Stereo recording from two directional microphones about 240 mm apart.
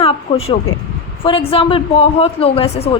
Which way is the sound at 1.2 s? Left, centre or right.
Left.